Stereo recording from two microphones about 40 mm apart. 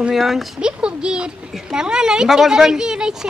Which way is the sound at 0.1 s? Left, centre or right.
Centre.